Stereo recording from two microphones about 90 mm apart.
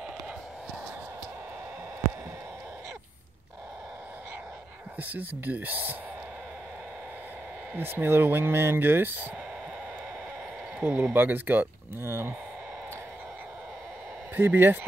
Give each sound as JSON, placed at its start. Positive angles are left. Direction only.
{"t": 5.1, "sound": "speech", "side_deg": -20}
{"t": 7.7, "sound": "speech", "side_deg": -25}
{"t": 10.8, "sound": "speech", "side_deg": -15}
{"t": 14.3, "sound": "speech", "side_deg": -25}